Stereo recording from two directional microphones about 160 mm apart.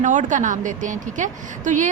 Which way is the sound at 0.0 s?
50° right (ahead or behind).